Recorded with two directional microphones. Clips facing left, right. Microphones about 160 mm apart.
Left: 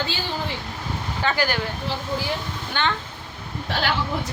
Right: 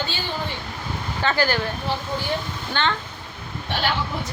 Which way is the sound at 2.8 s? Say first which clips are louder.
Right 1 dB; 10° left (ahead or behind).